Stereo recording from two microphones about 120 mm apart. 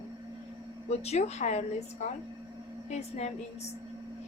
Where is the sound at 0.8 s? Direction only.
60° left (ahead or behind).